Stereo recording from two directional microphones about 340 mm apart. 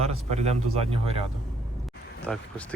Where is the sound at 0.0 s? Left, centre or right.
Centre.